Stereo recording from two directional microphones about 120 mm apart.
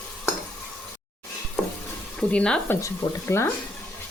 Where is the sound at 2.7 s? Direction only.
20° left (ahead or behind).